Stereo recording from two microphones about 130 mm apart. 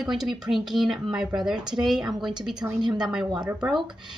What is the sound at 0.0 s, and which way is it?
Speech, centre (ahead or behind).